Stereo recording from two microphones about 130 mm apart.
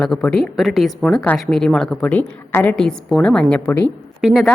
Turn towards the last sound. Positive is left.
turn(degrees=0)  # may be behind; listen again after turning